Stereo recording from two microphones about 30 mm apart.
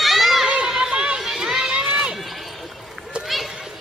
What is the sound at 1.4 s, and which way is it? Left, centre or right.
Run, centre.